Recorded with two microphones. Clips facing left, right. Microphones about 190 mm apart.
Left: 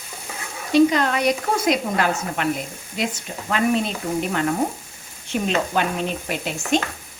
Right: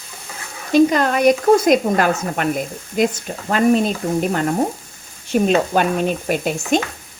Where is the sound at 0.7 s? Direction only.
45° right (ahead or behind).